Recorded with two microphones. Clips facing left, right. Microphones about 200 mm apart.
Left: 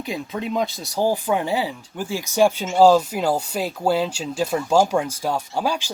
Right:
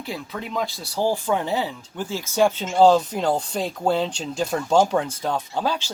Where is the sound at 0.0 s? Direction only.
20° left (ahead or behind).